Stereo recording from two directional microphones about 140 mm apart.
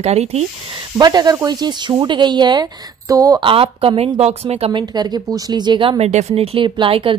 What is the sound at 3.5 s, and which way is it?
A woman's voice, 40° right (ahead or behind).